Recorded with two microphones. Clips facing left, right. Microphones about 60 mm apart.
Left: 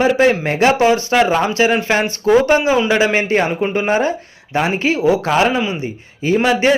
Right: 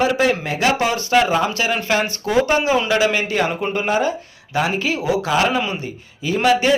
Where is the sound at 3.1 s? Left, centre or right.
Left.